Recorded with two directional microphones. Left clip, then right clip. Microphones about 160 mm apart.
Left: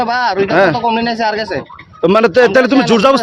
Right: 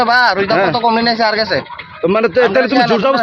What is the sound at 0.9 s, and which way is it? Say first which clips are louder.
Speech: right 2 dB; 5° left (ahead or behind).